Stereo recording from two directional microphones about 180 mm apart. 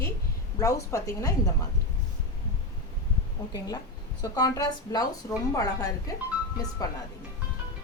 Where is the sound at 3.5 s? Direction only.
20° left (ahead or behind).